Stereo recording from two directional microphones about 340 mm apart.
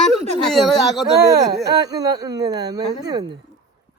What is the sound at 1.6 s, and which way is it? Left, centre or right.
Speech, centre.